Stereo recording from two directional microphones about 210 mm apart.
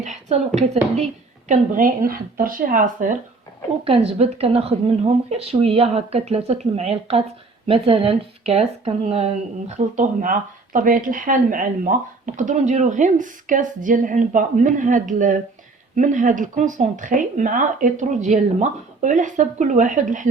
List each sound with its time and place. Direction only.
0.0 s speech: 35° right (ahead or behind)
3.8 s speech: 30° right (ahead or behind)